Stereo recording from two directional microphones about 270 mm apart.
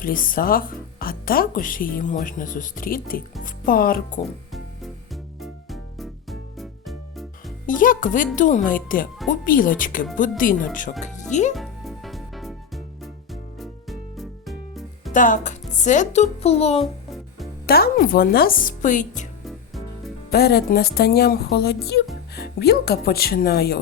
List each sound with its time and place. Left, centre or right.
0.0 s speech: left
4.5 s music: centre
7.7 s music: left
8.4 s speech: left
11.5 s music: centre
15.1 s speech: left
17.7 s speech: left
20.3 s speech: left